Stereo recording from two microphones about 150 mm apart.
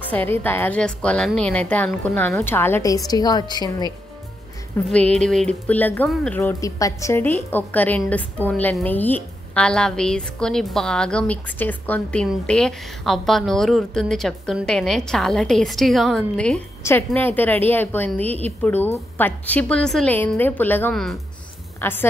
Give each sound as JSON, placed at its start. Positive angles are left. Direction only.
{"t": 0.1, "sound": "a woman's voice", "side_deg": 10}
{"t": 4.8, "sound": "a woman's voice", "side_deg": 5}
{"t": 6.4, "sound": "a woman's voice", "side_deg": 20}
{"t": 21.8, "sound": "a woman's voice", "side_deg": 15}